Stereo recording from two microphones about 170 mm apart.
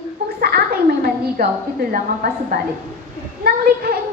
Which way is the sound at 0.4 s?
65° right (ahead or behind).